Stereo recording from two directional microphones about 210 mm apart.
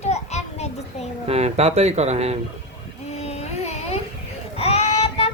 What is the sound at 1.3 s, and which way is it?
Speech, 30° right (ahead or behind).